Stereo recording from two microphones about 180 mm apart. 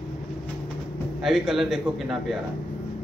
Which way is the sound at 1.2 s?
Centre (ahead or behind).